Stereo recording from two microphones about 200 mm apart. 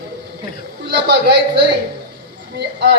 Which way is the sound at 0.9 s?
60° right (ahead or behind).